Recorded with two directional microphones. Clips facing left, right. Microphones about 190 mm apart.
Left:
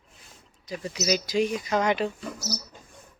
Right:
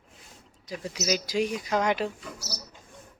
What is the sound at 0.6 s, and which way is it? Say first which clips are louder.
A woman's voice: left 2 dB; 10° right (ahead or behind).